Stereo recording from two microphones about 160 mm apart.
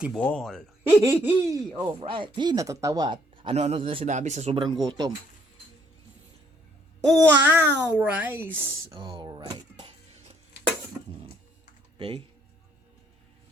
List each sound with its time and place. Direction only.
0.2 s speech: 5° left (ahead or behind)
1.0 s a child's voice: 10° right (ahead or behind)
2.0 s speech: 30° right (ahead or behind)
4.0 s speech: 45° right (ahead or behind); by 5.1 s 25° right (ahead or behind)
7.1 s a child's voice: 10° right (ahead or behind)
8.9 s a sound: 30° right (ahead or behind)
11.9 s speech: 35° right (ahead or behind)